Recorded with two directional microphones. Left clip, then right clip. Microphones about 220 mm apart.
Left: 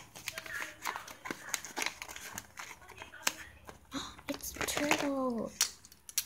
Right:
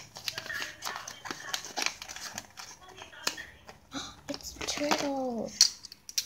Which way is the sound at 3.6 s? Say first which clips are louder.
Right 2 dB; 10° left (ahead or behind).